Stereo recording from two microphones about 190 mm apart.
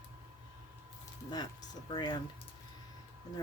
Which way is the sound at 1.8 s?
25° left (ahead or behind).